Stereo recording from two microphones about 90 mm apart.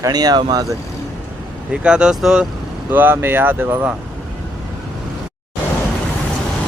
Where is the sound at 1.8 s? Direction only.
10° right (ahead or behind).